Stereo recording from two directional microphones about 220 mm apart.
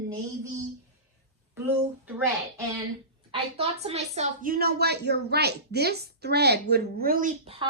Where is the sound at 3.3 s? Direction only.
25° right (ahead or behind).